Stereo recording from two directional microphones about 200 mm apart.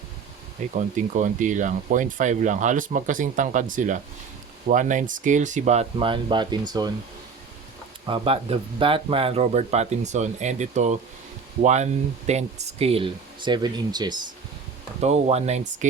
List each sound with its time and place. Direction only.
0.8 s speech: 40° right (ahead or behind); by 6.9 s 20° right (ahead or behind)
8.0 s speech: 25° right (ahead or behind)
15.0 s speech: 30° right (ahead or behind)